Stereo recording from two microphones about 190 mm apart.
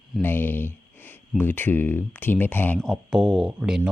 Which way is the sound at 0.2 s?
10° left (ahead or behind).